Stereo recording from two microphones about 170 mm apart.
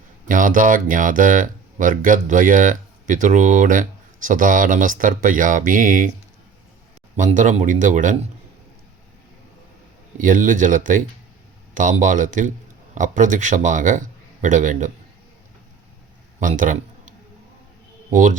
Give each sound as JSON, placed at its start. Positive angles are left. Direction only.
{"t": 0.3, "sound": "speech", "side_deg": -50}
{"t": 7.2, "sound": "speech", "side_deg": -45}
{"t": 10.2, "sound": "a man's voice", "side_deg": -50}
{"t": 16.4, "sound": "a sound", "side_deg": -50}
{"t": 18.1, "sound": "speech", "side_deg": -50}